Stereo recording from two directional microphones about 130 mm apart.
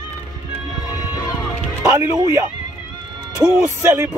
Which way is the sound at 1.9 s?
20° right (ahead or behind).